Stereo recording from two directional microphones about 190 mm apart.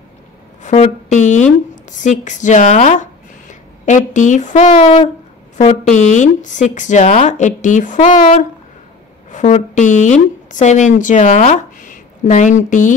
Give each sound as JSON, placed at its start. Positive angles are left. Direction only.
{"t": 0.6, "sound": "a woman's voice", "side_deg": 35}